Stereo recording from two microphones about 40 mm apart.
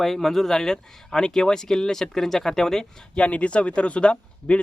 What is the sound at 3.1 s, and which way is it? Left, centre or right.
Speech, left.